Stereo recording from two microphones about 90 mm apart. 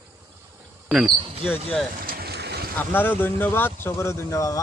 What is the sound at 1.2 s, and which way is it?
Speech, 90° right.